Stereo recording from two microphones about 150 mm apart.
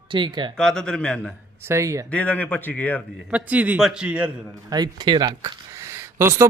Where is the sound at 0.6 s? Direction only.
5° left (ahead or behind).